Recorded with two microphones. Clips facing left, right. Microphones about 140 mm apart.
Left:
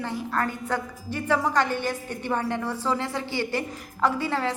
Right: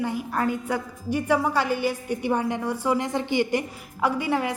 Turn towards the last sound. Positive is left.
turn(degrees=-15)  # may be behind; listen again after turning